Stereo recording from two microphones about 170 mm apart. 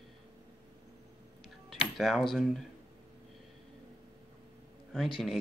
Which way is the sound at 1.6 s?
Centre (ahead or behind).